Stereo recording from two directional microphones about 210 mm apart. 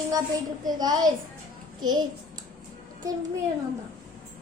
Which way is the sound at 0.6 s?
20° right (ahead or behind).